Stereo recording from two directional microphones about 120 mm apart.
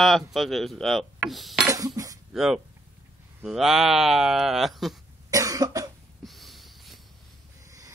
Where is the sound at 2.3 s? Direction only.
5° right (ahead or behind).